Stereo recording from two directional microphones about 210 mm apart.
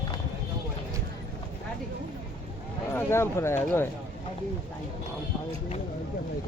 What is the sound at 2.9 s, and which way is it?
Speech, 10° left (ahead or behind).